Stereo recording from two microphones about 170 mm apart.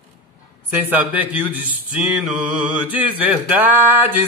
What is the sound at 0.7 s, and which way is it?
Speech, 10° right (ahead or behind).